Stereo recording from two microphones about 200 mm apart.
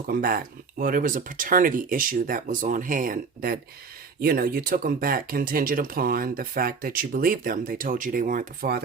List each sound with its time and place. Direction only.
0.1 s speech: 45° right (ahead or behind)